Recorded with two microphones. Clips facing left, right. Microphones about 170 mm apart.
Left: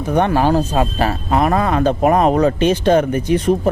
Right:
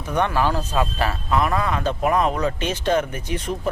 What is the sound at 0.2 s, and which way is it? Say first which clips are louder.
Speech: left 6 dB; 40° left (ahead or behind).